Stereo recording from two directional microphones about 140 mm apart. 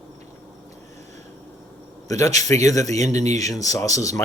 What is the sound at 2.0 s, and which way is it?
Speech, 25° left (ahead or behind).